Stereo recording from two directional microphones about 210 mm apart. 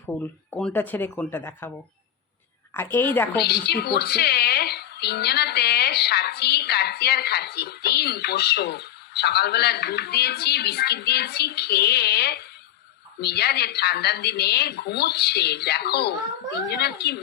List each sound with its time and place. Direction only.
0.5 s speech: 10° left (ahead or behind)
2.7 s speech: 10° left (ahead or behind)
3.3 s a woman's voice: 50° left (ahead or behind)